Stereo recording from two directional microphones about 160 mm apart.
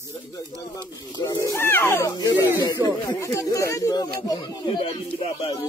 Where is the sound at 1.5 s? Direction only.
15° left (ahead or behind).